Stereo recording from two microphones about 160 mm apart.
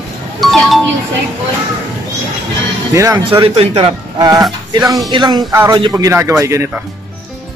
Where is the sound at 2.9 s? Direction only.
20° right (ahead or behind).